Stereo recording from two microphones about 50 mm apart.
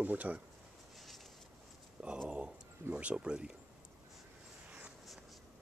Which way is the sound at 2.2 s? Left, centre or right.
Right.